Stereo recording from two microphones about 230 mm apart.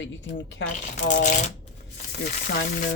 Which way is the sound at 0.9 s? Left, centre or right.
Left.